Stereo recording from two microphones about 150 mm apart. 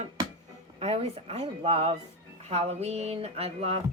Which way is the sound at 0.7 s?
45° right (ahead or behind).